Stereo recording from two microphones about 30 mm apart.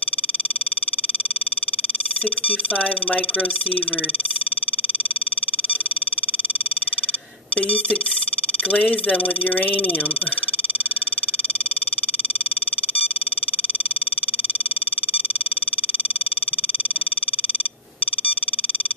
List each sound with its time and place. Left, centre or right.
7.6 s speech: left
8.6 s speech: centre